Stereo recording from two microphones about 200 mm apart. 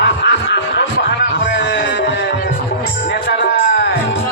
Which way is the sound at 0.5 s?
60° left (ahead or behind).